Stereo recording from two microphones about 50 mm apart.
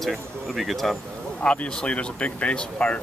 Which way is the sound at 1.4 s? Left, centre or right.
Left.